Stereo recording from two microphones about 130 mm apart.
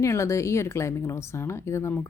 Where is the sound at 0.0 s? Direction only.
20° left (ahead or behind).